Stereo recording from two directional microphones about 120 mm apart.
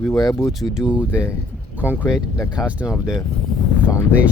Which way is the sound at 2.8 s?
5° right (ahead or behind).